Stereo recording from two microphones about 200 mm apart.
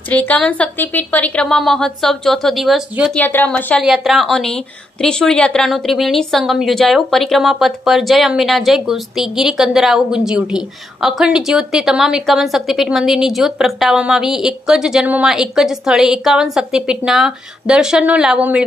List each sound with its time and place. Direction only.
0.1 s a woman's voice: 10° left (ahead or behind)